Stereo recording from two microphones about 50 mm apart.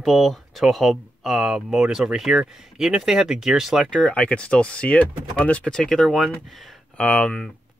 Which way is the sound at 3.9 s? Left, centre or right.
Centre.